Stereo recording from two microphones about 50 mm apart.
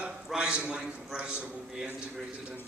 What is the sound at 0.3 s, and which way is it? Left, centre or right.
A man's voice, centre.